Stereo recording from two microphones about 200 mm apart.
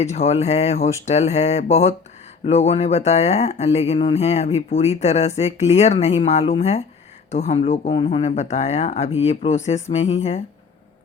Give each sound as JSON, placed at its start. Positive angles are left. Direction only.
{"t": 0.0, "sound": "speech", "side_deg": 30}